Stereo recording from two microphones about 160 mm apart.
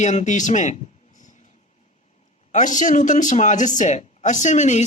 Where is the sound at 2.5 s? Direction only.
50° left (ahead or behind).